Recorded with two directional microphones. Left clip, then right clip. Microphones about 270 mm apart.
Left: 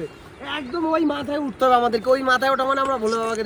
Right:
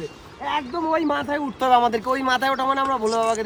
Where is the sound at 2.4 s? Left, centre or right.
Right.